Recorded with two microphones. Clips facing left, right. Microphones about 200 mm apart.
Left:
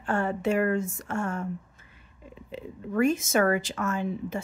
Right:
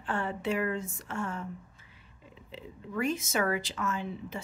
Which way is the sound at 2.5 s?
50° left (ahead or behind).